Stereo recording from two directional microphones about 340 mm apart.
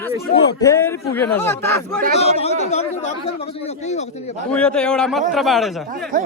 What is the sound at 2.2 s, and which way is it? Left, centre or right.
Speech, centre.